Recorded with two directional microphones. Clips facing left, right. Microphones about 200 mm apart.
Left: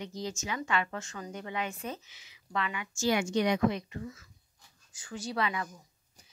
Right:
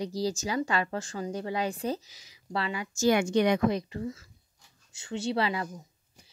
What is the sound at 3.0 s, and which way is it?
Speech, 55° right (ahead or behind).